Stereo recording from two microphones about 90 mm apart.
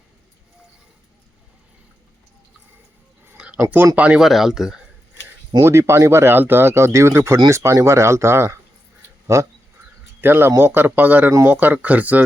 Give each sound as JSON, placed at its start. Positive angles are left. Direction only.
{"t": 3.6, "sound": "speech", "side_deg": -20}
{"t": 4.2, "sound": "speech", "side_deg": -5}
{"t": 5.5, "sound": "speech", "side_deg": -30}
{"t": 10.2, "sound": "speech", "side_deg": -25}